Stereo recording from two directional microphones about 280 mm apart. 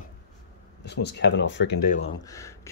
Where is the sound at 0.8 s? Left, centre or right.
Left.